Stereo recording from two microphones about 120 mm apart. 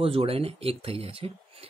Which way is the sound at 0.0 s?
55° right (ahead or behind).